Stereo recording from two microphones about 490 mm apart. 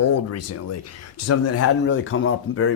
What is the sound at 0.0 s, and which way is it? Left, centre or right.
Speech, left.